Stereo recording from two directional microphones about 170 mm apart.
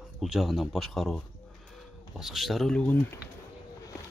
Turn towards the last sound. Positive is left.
turn(degrees=5)  # may be behind; listen again after turning